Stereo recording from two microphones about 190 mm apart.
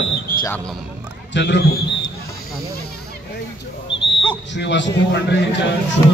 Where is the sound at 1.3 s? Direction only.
65° left (ahead or behind).